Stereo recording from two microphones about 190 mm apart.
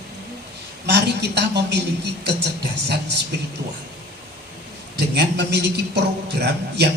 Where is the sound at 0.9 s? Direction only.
60° right (ahead or behind).